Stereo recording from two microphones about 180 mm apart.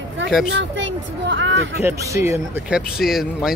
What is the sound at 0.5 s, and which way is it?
A child's voice, 90° right.